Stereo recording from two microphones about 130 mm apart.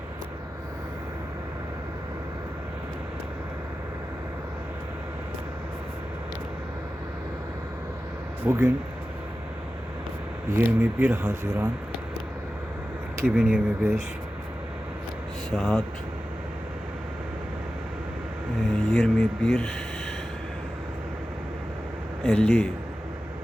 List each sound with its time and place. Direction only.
8.4 s speech: 20° right (ahead or behind)
10.6 s speech: 15° right (ahead or behind)
13.1 s speech: 15° right (ahead or behind)
15.5 s speech: centre (ahead or behind)
18.9 s speech: centre (ahead or behind)
22.2 s speech: 5° left (ahead or behind)